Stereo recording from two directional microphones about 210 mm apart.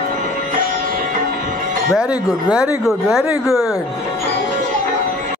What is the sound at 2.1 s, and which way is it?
Speech, 20° left (ahead or behind).